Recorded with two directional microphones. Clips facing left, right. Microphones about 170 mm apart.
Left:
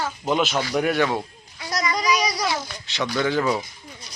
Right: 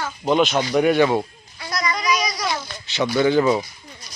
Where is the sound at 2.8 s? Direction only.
Centre (ahead or behind).